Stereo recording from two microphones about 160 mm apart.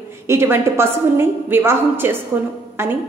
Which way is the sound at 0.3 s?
15° right (ahead or behind).